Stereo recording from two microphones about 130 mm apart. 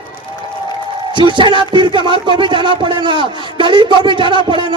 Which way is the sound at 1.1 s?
35° right (ahead or behind).